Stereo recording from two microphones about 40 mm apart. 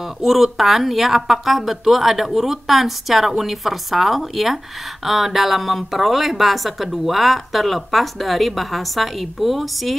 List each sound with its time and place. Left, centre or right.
0.0 s a woman's voice: centre